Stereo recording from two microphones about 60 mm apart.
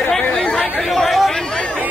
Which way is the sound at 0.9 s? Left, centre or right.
Centre.